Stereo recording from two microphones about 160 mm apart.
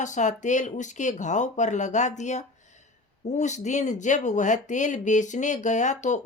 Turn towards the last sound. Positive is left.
turn(degrees=50)  # may be behind; listen again after turning